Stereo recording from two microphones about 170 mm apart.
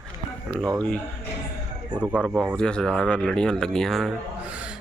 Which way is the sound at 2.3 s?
10° right (ahead or behind).